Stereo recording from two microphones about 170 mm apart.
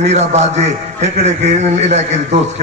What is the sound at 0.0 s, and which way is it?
A man's voice, 40° right (ahead or behind).